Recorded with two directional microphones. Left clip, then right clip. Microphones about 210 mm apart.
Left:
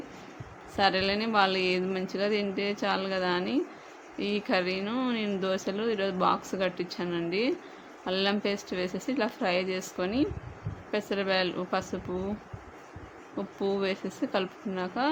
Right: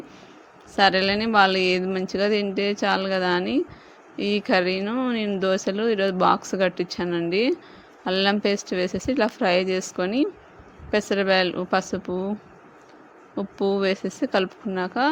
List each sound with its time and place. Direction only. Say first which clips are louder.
0.8 s speech: right 7 dB; 30° right (ahead or behind)
13.3 s speech: right 7 dB; 30° right (ahead or behind)